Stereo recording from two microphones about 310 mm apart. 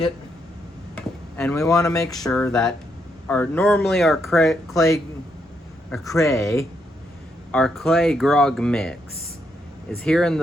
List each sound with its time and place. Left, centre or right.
1.4 s speech: centre
10.0 s speech: centre